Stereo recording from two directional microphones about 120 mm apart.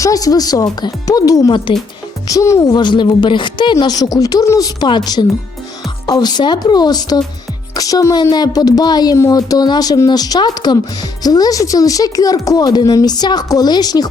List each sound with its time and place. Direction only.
0.0 s speech: 30° left (ahead or behind)